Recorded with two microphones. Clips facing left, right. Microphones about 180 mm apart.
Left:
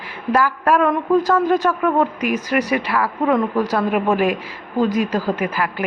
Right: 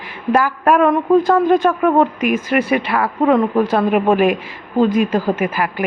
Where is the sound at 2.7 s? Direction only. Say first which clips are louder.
Right 3 dB; 25° right (ahead or behind).